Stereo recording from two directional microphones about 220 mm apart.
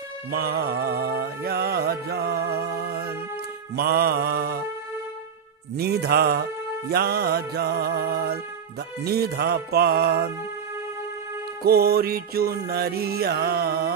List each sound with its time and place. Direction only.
0.3 s music: 45° right (ahead or behind)
5.8 s music: 45° right (ahead or behind)
11.6 s music: 45° right (ahead or behind)